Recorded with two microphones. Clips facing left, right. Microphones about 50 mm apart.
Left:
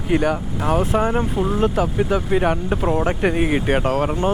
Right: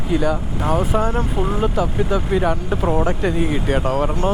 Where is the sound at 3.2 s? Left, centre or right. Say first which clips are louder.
Left 1 dB; left.